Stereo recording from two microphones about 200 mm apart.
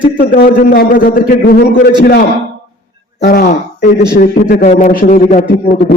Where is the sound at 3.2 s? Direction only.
50° left (ahead or behind).